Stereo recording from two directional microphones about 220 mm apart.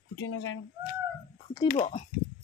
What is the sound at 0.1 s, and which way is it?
Speech, 60° left (ahead or behind).